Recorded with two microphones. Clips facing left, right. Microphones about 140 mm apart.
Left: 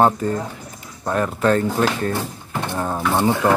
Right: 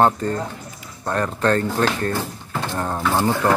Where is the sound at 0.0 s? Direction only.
10° left (ahead or behind).